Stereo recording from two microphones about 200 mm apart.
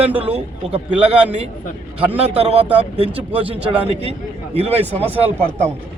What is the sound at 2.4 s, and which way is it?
A man's voice, 30° right (ahead or behind).